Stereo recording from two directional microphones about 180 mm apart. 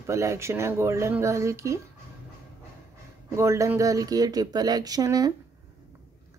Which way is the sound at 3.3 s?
15° right (ahead or behind).